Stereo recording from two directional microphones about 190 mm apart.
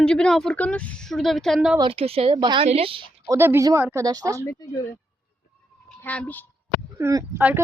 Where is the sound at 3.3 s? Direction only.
10° right (ahead or behind).